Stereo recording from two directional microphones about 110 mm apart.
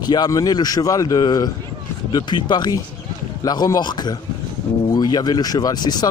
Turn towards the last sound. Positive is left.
turn(degrees=40)  # may be behind; listen again after turning